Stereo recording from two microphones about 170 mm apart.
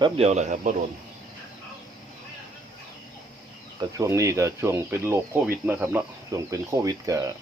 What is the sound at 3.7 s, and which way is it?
Speech, 20° right (ahead or behind).